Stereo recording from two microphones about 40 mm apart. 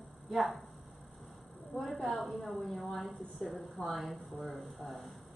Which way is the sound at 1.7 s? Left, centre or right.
Left.